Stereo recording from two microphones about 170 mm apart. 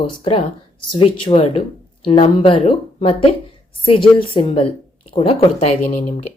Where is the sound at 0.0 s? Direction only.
30° left (ahead or behind).